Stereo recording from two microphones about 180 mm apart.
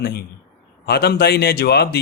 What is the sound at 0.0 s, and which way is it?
Speech, 60° left (ahead or behind).